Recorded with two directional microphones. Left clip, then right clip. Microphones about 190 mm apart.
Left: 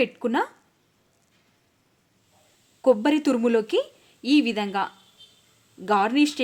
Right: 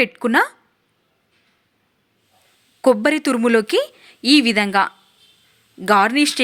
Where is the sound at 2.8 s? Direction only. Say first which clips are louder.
Right 4 dB; 15° right (ahead or behind).